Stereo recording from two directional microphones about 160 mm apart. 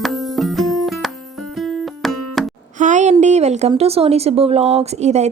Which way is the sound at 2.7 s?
50° right (ahead or behind).